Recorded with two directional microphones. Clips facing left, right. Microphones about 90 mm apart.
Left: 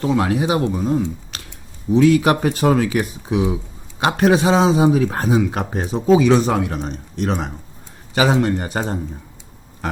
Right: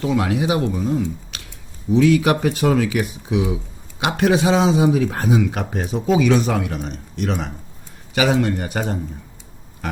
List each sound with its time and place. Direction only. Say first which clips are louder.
0.0 s speech: left 1 dB; 35° left (ahead or behind)